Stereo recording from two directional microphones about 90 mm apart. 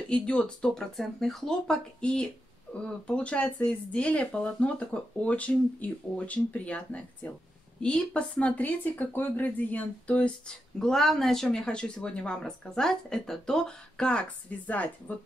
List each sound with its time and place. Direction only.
0.1 s speech: 10° left (ahead or behind)